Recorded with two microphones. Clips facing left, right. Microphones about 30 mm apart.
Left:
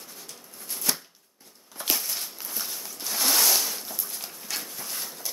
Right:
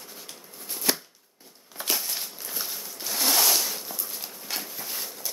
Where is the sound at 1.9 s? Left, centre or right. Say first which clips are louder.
Even; centre.